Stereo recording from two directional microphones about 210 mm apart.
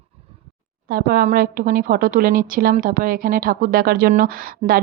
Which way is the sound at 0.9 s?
45° right (ahead or behind).